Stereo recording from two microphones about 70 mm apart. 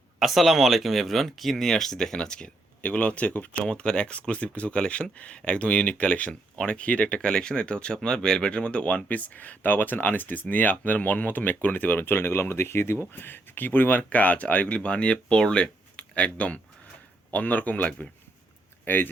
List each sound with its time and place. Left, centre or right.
0.2 s speech: centre; by 19.1 s left